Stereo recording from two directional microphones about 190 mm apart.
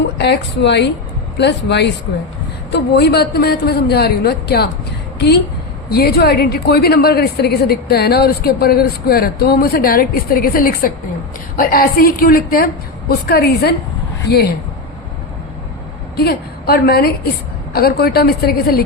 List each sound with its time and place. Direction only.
0.2 s a man's voice: 65° left (ahead or behind)
5.9 s a woman's voice: 55° left (ahead or behind)
16.1 s a man's voice: 55° left (ahead or behind)